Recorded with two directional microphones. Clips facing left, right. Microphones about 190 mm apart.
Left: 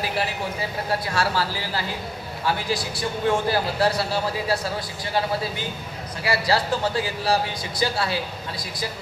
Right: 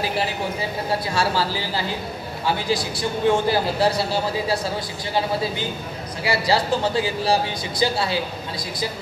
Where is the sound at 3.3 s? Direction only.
25° right (ahead or behind).